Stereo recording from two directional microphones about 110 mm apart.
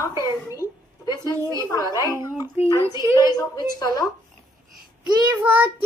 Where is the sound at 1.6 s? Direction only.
30° left (ahead or behind).